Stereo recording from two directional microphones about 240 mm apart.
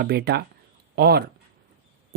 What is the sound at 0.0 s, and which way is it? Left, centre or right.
Speech, right.